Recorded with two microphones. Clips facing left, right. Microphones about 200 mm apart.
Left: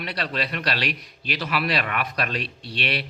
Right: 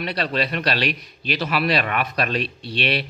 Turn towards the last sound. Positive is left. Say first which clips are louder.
# right 5 dB
turn(degrees=-25)  # may be behind; listen again after turning